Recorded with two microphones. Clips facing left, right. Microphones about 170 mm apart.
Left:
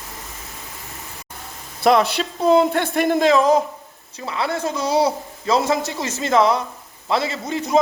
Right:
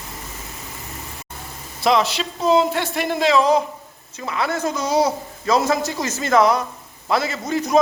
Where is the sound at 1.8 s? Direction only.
55° left (ahead or behind).